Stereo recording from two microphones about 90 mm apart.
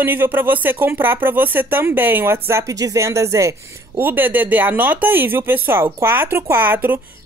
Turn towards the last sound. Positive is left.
turn(degrees=-20)  # may be behind; listen again after turning